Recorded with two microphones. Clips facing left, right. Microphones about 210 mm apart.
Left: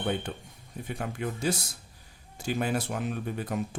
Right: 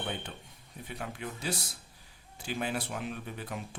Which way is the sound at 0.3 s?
45° left (ahead or behind).